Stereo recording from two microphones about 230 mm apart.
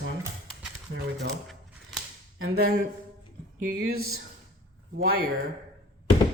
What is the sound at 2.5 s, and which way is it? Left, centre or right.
Speech, right.